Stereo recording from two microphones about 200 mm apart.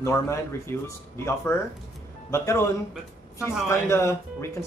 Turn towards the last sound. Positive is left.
turn(degrees=15)  # may be behind; listen again after turning